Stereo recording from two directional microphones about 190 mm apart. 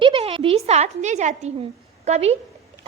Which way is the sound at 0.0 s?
30° right (ahead or behind).